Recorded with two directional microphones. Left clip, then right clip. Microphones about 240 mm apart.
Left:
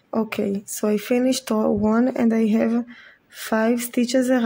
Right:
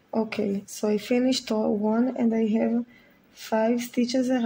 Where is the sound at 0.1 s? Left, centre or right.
Centre.